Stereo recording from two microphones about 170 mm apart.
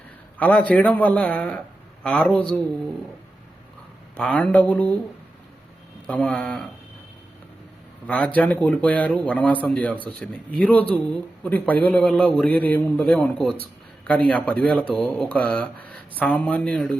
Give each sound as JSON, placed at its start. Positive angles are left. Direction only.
{"t": 0.3, "sound": "a man's voice", "side_deg": 10}
{"t": 4.2, "sound": "a man's voice", "side_deg": 5}
{"t": 6.1, "sound": "speech", "side_deg": 5}
{"t": 8.0, "sound": "a man's voice", "side_deg": 5}